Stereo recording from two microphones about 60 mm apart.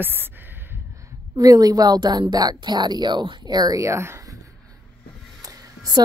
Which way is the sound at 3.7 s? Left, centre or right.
Right.